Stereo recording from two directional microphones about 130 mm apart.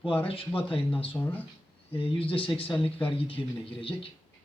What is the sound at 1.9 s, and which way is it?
Speech, 45° left (ahead or behind).